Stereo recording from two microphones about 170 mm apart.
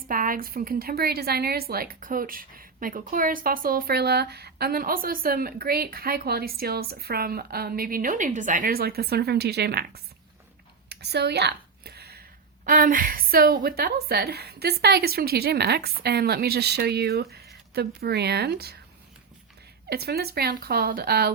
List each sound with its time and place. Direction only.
0.1 s a woman's voice: 55° right (ahead or behind); by 10.0 s 70° right (ahead or behind)
10.8 s a sound: 75° right (ahead or behind)
12.6 s a woman's voice: 55° right (ahead or behind); by 18.8 s 70° right (ahead or behind)
19.9 s a woman's voice: 70° right (ahead or behind)